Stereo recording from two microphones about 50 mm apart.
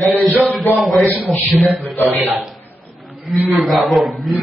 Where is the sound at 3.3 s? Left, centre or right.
Centre.